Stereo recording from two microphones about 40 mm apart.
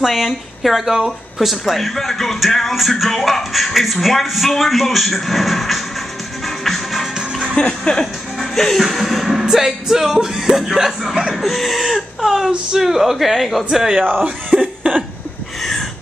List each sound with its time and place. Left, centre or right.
0.1 s speech: centre
6.4 s music: centre
7.2 s music: right
7.5 s speech: left
8.4 s speech: centre
14.1 s speech: right